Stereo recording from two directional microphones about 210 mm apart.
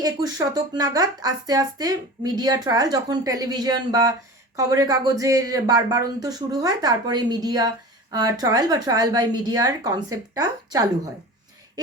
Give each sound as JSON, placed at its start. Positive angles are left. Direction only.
{"t": 0.0, "sound": "speech", "side_deg": -15}